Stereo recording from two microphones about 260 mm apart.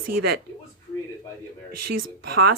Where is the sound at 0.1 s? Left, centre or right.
Right.